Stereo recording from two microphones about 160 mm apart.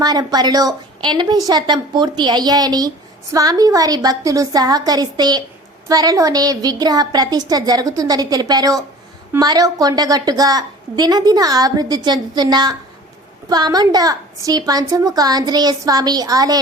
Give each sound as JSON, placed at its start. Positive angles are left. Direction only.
{"t": 0.0, "sound": "a woman's voice", "side_deg": -25}